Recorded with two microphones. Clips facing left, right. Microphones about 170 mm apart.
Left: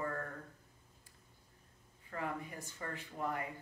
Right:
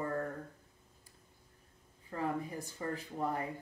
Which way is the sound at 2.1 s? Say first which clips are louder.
Right 5 dB; 35° right (ahead or behind).